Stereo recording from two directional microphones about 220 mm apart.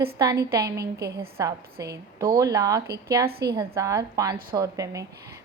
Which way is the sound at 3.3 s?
45° right (ahead or behind).